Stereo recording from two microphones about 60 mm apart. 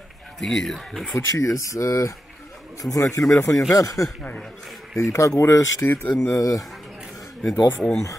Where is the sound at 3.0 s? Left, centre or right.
Left.